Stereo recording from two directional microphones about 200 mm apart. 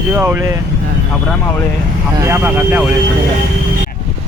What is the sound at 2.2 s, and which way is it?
Speech, 10° right (ahead or behind).